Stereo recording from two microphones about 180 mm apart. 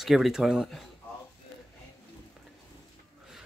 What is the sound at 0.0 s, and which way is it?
Speech, centre (ahead or behind).